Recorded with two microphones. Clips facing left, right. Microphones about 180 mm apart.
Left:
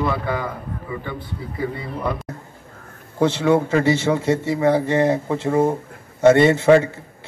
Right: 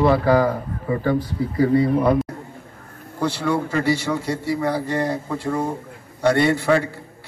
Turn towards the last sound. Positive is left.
turn(degrees=20)  # may be behind; listen again after turning